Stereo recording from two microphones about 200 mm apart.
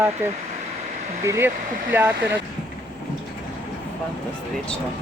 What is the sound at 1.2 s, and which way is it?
Speech, 15° right (ahead or behind).